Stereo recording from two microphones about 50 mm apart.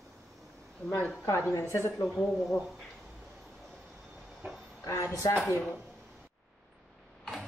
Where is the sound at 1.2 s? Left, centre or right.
Left.